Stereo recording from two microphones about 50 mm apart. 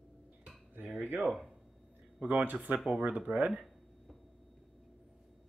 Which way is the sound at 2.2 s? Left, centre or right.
Right.